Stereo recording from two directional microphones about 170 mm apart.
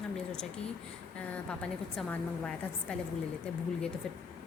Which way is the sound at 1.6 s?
5° left (ahead or behind).